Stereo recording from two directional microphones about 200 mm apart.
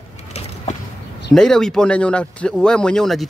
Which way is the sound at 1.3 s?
5° left (ahead or behind).